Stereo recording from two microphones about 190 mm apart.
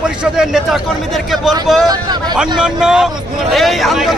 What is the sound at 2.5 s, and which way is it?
Speech, 5° right (ahead or behind).